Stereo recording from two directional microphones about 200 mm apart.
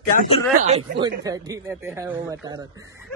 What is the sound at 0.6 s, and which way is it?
Speech, 30° right (ahead or behind).